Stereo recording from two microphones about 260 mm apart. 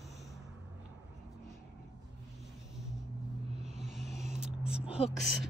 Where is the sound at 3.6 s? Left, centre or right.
Centre.